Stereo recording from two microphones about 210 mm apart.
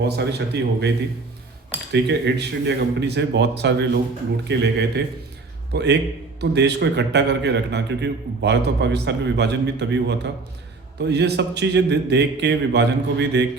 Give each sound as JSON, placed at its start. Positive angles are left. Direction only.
{"t": 0.0, "sound": "a man's voice", "side_deg": -55}